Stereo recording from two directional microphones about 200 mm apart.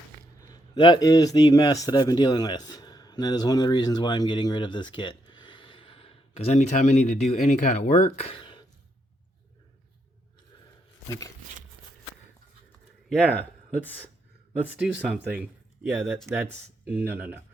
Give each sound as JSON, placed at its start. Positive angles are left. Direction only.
{"t": 0.4, "sound": "a man's voice", "side_deg": 20}
{"t": 13.2, "sound": "speech", "side_deg": -10}
{"t": 13.8, "sound": "speech", "side_deg": 10}
{"t": 14.6, "sound": "speech", "side_deg": -5}